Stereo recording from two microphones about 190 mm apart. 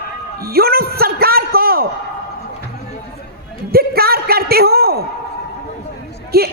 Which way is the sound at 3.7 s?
55° right (ahead or behind).